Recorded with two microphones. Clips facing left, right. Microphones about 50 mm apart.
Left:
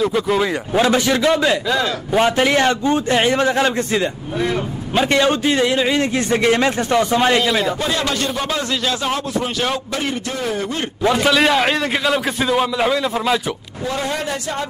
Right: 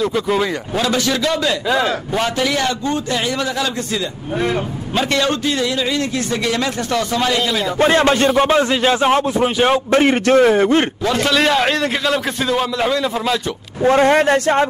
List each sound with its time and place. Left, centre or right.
0.0 s a man's voice: centre
0.7 s a man's voice: left
4.9 s a man's voice: centre
7.4 s a man's voice: centre
7.8 s a man's voice: right
9.8 s speech: right
10.2 s a man's voice: right
10.5 s speech: right
11.1 s a man's voice: centre
13.8 s speech: right